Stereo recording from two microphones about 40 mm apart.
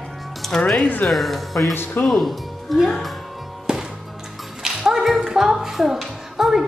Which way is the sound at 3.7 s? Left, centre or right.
Centre.